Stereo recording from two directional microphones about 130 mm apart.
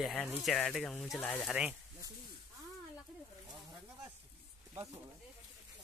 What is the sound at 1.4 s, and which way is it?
Speech, 5° right (ahead or behind).